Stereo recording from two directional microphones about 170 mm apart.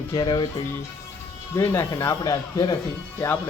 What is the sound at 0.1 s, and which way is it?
Speech, 25° left (ahead or behind).